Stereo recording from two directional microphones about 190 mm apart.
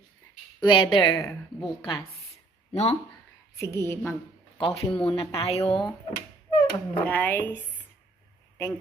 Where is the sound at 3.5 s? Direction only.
15° left (ahead or behind).